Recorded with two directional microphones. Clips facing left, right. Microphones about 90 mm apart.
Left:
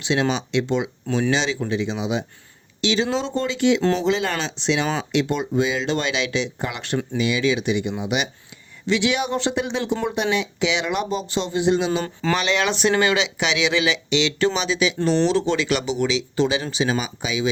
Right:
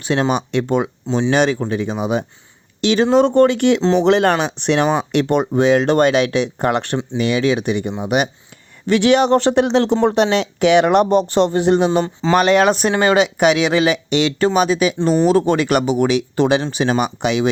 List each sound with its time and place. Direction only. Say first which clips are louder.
0.0 s speech: right 4 dB; 45° right (ahead or behind)
3.8 s speech: right 5 dB; 25° right (ahead or behind)
4.0 s speech: right 8 dB; 65° right (ahead or behind)